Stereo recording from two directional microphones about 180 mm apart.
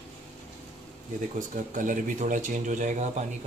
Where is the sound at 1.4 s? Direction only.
45° right (ahead or behind).